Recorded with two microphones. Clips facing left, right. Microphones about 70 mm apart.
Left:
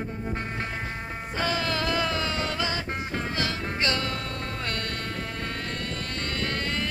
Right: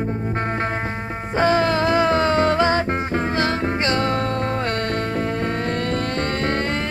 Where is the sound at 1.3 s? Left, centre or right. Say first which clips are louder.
Right 10 dB; right.